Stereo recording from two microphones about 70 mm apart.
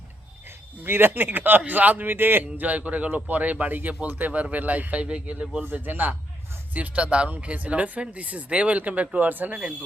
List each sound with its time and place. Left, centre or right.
0.9 s speech: right